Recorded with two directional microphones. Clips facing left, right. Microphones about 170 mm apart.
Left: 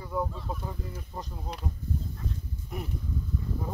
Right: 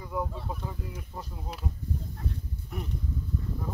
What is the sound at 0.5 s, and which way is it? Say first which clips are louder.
Speech: left 1 dB; 10° right (ahead or behind).